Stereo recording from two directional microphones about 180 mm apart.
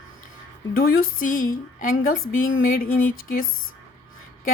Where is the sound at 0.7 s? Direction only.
55° left (ahead or behind).